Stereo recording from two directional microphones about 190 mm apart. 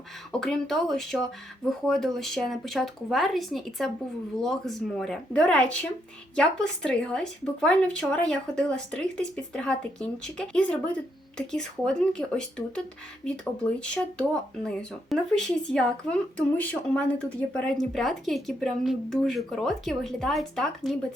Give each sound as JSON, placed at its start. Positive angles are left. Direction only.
{"t": 0.3, "sound": "speech", "side_deg": 5}